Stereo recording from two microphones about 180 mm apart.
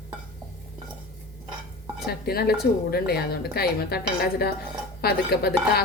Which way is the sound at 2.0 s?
60° left (ahead or behind).